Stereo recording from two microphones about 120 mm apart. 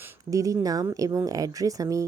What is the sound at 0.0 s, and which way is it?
Speech, 30° right (ahead or behind).